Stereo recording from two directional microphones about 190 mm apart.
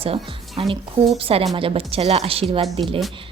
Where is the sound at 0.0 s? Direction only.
30° right (ahead or behind).